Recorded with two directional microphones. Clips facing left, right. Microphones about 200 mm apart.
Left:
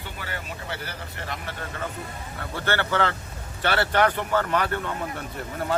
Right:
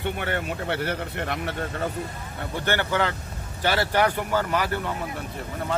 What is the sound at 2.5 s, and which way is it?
A man's voice, 15° right (ahead or behind).